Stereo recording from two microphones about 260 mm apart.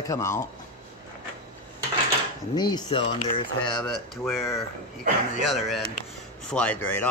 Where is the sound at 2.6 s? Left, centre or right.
Centre.